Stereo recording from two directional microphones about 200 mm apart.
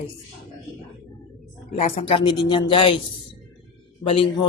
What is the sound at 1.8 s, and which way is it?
A man's voice, 30° left (ahead or behind).